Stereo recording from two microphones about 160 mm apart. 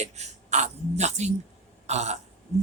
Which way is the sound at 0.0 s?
45° right (ahead or behind).